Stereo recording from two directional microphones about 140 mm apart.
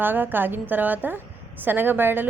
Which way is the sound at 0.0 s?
15° right (ahead or behind).